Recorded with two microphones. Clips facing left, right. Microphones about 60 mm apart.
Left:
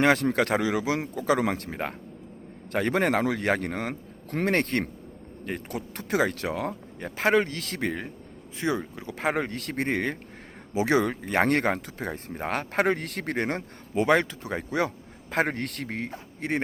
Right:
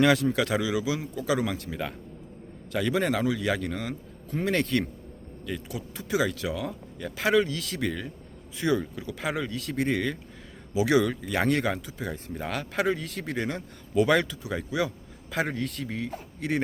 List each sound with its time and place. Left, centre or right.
0.0 s speech: left
4.5 s speech: left
9.1 s speech: left
13.9 s speech: left